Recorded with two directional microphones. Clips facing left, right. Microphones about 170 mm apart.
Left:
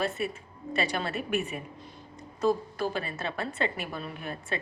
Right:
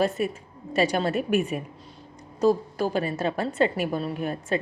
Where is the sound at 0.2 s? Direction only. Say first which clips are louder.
Right 5 dB; 45° right (ahead or behind).